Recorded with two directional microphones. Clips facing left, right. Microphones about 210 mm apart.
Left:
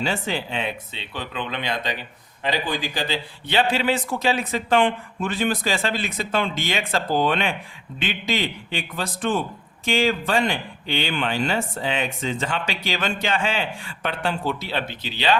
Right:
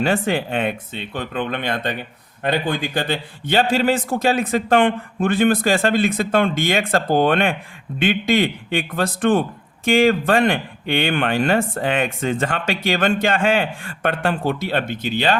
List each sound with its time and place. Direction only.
0.0 s speech: 55° right (ahead or behind)